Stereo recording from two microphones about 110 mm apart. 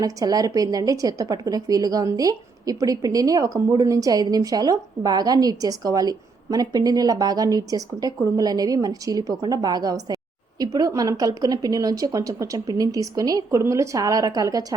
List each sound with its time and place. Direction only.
0.0 s a woman's voice: 35° right (ahead or behind)